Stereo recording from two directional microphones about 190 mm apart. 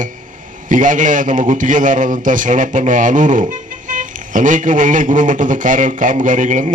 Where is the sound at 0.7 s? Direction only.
45° right (ahead or behind).